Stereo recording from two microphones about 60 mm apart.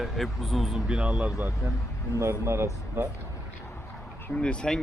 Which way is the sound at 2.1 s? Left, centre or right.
Right.